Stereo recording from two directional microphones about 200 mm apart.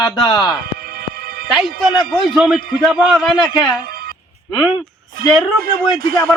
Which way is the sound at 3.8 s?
50° right (ahead or behind).